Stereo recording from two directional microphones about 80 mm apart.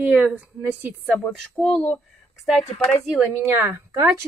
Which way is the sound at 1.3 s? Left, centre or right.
Centre.